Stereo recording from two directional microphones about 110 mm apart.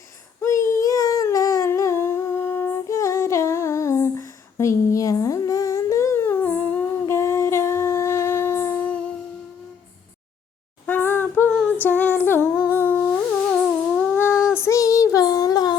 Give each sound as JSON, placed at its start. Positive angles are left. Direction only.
{"t": 0.4, "sound": "humming", "side_deg": 30}
{"t": 10.8, "sound": "singing", "side_deg": 20}
{"t": 11.8, "sound": "female singing", "side_deg": 15}
{"t": 12.7, "sound": "humming", "side_deg": 15}
{"t": 13.0, "sound": "theremin", "side_deg": 5}
{"t": 14.2, "sound": "child singing", "side_deg": 25}